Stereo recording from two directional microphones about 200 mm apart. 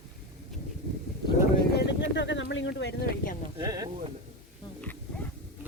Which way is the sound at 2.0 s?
65° left (ahead or behind).